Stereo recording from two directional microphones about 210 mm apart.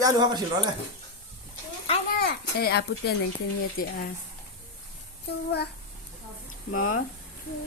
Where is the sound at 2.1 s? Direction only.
50° left (ahead or behind).